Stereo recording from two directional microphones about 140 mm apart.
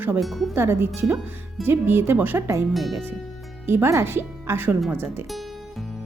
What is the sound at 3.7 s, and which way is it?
Speech, 20° right (ahead or behind).